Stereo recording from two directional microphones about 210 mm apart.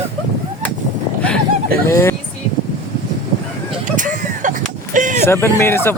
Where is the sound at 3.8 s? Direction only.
35° right (ahead or behind).